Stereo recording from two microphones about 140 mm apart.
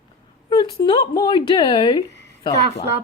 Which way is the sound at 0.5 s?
30° left (ahead or behind).